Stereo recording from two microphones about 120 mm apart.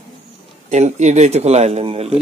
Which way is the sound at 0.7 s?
70° right (ahead or behind).